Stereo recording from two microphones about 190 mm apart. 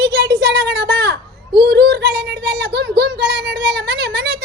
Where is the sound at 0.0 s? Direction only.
60° right (ahead or behind).